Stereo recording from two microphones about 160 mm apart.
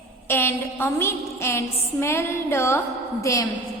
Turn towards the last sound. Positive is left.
turn(degrees=20)  # may be behind; listen again after turning